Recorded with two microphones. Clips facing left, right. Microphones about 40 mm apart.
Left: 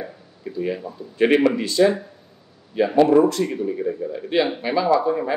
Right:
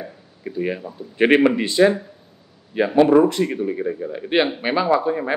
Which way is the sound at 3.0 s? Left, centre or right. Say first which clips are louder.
Right 1 dB; right.